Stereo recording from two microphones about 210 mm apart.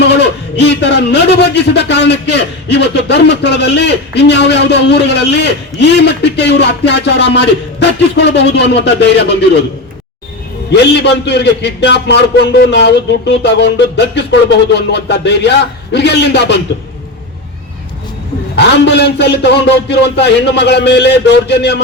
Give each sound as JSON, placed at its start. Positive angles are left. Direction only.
{"t": 0.0, "sound": "a man's voice", "side_deg": 55}
{"t": 10.7, "sound": "a man's voice", "side_deg": 55}
{"t": 18.5, "sound": "a man's voice", "side_deg": 55}